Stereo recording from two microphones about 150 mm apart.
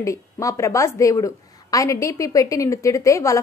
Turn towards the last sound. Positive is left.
turn(degrees=20)  # may be behind; listen again after turning